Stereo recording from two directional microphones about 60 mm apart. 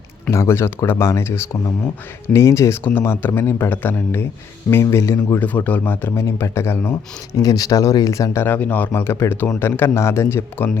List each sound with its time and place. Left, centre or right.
0.3 s speech: left
1.3 s speech: left
2.3 s speech: left
3.0 s speech: left
5.4 s speech: left
6.1 s speech: left
7.3 s speech: left
8.5 s speech: left
8.9 s speech: left